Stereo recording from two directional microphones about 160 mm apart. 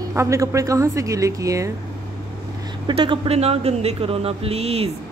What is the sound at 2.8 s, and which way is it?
Speech, 30° right (ahead or behind).